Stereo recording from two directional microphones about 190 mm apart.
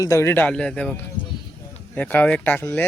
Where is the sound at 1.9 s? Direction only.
10° left (ahead or behind).